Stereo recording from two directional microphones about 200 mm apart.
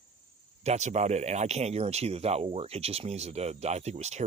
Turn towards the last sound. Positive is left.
turn(degrees=-35)  # may be behind; listen again after turning